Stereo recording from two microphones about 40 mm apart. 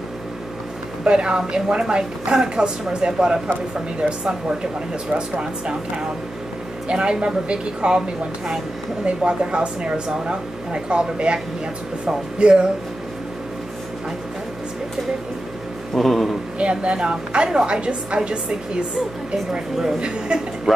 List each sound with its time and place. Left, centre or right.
1.0 s speech: right
9.0 s speech: right
15.9 s a man's voice: centre
16.5 s speech: right
19.5 s speech: right